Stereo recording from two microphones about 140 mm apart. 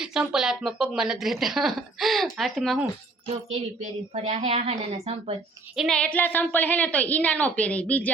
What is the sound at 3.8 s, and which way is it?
Speech, 55° right (ahead or behind).